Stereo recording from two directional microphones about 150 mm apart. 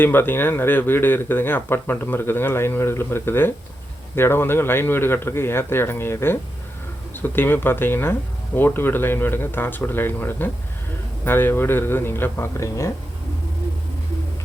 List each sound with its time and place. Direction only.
0.0 s speech: 15° left (ahead or behind)